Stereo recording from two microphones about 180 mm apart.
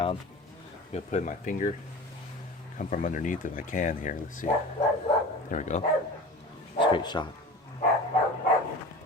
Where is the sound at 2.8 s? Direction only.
45° left (ahead or behind).